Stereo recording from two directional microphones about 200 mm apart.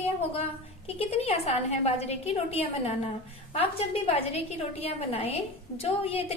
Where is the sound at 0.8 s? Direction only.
30° left (ahead or behind).